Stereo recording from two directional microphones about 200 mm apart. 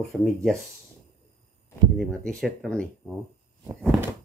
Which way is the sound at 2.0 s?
5° left (ahead or behind).